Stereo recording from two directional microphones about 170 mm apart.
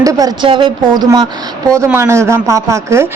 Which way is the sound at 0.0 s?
20° right (ahead or behind).